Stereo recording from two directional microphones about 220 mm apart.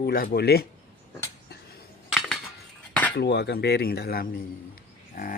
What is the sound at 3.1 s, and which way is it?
Speech, 50° left (ahead or behind).